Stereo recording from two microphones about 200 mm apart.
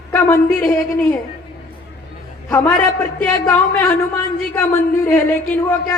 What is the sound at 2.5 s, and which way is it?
A woman's voice, 10° left (ahead or behind).